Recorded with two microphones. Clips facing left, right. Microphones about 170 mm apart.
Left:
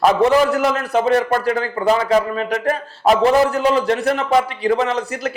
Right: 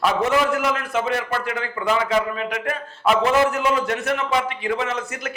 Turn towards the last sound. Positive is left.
turn(degrees=35)  # may be behind; listen again after turning